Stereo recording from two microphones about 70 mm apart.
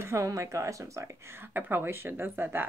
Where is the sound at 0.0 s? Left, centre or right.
Right.